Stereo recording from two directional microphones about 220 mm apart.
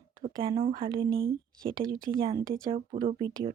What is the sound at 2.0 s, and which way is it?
Speech, 20° right (ahead or behind).